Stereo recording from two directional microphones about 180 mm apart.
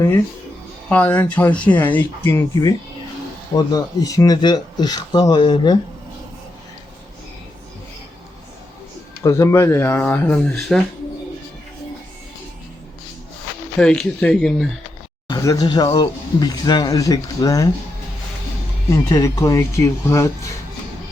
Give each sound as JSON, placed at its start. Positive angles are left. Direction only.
{"t": 0.9, "sound": "speech", "side_deg": 10}
{"t": 3.5, "sound": "speech", "side_deg": 20}
{"t": 9.2, "sound": "speech", "side_deg": 15}
{"t": 13.7, "sound": "speech", "side_deg": 5}
{"t": 15.3, "sound": "speech", "side_deg": 20}
{"t": 18.9, "sound": "speech", "side_deg": 15}